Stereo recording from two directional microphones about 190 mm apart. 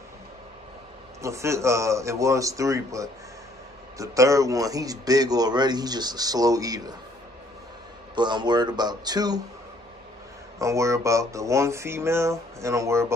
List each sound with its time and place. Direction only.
1.2 s a man's voice: 15° right (ahead or behind)
8.2 s a man's voice: 25° right (ahead or behind)
10.6 s speech: 15° right (ahead or behind)